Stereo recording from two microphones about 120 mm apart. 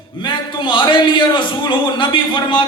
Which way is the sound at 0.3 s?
40° left (ahead or behind).